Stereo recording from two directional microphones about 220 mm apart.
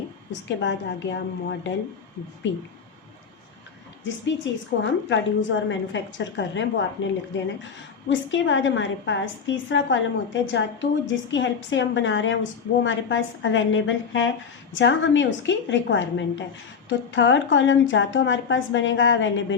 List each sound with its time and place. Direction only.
0.3 s a woman's voice: 55° left (ahead or behind)
4.4 s a woman's voice: 55° left (ahead or behind)
8.1 s a woman's voice: 60° left (ahead or behind)